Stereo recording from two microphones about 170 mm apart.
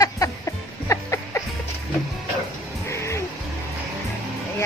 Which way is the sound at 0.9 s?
15° left (ahead or behind).